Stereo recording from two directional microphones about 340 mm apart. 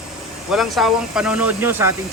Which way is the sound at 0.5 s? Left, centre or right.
Centre.